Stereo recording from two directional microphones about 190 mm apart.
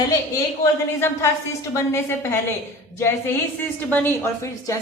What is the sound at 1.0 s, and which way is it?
A woman's voice, 15° left (ahead or behind).